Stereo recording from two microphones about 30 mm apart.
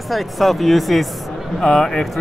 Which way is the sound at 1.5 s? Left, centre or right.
Centre.